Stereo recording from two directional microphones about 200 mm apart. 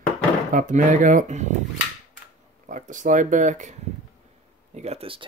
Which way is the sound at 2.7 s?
40° right (ahead or behind).